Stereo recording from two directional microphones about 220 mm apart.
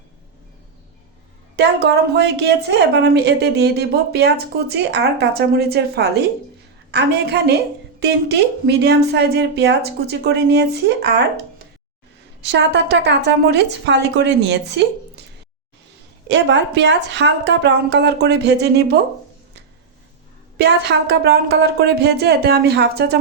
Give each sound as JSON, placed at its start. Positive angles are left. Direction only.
{"t": 1.5, "sound": "a woman's voice", "side_deg": -50}
{"t": 8.6, "sound": "a woman's voice", "side_deg": -50}
{"t": 12.4, "sound": "a woman's voice", "side_deg": -50}
{"t": 16.3, "sound": "a woman's voice", "side_deg": -50}
{"t": 20.6, "sound": "a woman's voice", "side_deg": -50}